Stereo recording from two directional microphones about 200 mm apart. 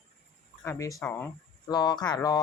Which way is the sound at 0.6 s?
15° left (ahead or behind).